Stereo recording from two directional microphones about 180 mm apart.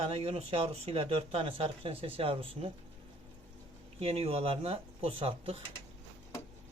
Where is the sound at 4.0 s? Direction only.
35° right (ahead or behind).